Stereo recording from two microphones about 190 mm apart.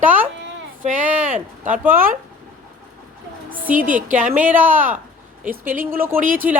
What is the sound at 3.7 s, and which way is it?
Speech, 45° right (ahead or behind).